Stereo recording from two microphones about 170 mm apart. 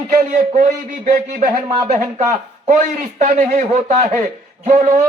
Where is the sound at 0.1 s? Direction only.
55° right (ahead or behind).